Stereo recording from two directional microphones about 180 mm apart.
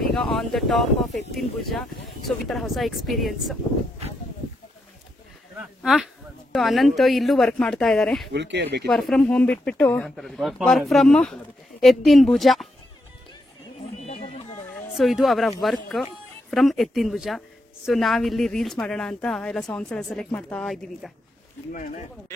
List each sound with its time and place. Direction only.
0.1 s speech: centre (ahead or behind)
5.8 s a sound: centre (ahead or behind)
6.5 s speech: centre (ahead or behind)
8.3 s speech: 75° right (ahead or behind)
8.8 s speech: centre (ahead or behind)
13.9 s a sound: 35° left (ahead or behind)
14.7 s speech: centre (ahead or behind)
21.7 s speech: 45° left (ahead or behind)